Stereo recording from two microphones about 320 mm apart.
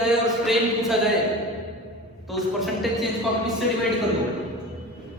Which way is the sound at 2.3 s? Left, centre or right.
Centre.